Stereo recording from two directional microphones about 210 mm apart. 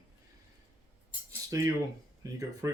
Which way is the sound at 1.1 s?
15° right (ahead or behind).